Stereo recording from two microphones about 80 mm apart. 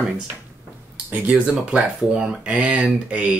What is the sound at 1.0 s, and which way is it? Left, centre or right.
Speech, right.